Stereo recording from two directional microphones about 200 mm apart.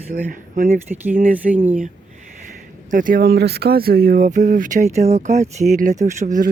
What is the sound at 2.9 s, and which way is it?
Speech, 40° right (ahead or behind).